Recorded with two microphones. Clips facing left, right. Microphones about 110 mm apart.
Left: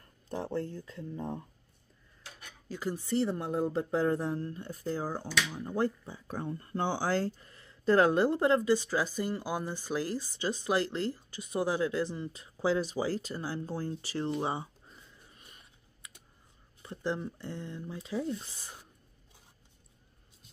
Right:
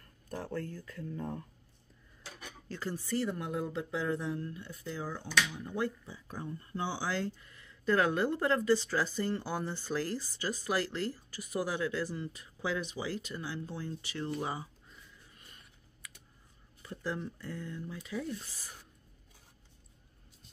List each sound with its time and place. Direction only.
0.3 s speech: 25° left (ahead or behind)
2.7 s speech: 15° left (ahead or behind); by 14.3 s 35° left (ahead or behind)
14.3 s computer keyboard: 25° left (ahead or behind)
16.8 s speech: 25° left (ahead or behind)